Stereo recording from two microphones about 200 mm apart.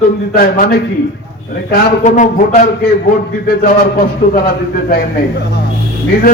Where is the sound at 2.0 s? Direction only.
40° left (ahead or behind).